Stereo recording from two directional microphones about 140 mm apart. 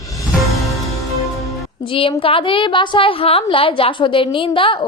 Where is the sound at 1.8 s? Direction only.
40° left (ahead or behind).